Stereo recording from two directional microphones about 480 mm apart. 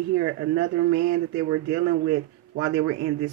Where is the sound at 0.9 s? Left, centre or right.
Right.